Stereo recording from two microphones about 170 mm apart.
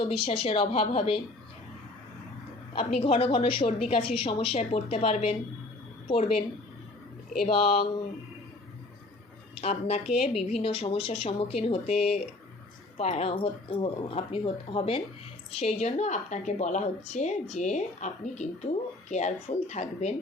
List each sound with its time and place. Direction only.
0.0 s a woman's voice: 35° left (ahead or behind)
2.7 s a woman's voice: 35° left (ahead or behind)
7.4 s a woman's voice: 35° left (ahead or behind)
9.6 s a woman's voice: 40° left (ahead or behind)